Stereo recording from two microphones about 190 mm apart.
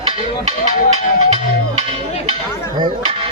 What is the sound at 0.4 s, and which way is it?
Music, 35° right (ahead or behind).